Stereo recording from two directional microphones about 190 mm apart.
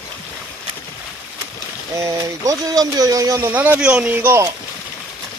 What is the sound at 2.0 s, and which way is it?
Speech, 15° right (ahead or behind).